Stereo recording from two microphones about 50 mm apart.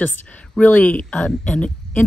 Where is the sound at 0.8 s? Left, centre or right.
Left.